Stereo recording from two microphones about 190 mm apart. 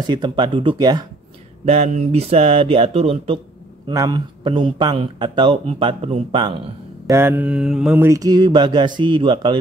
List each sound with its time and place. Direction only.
0.0 s mantra: 25° right (ahead or behind)
1.7 s speech: 35° right (ahead or behind)
3.8 s mantra: 20° right (ahead or behind)
7.1 s mantra: 10° right (ahead or behind)